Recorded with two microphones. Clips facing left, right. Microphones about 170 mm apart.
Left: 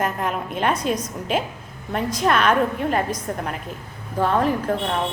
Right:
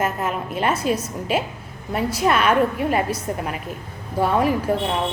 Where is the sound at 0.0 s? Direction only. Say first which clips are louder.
Right 1 dB; 5° right (ahead or behind).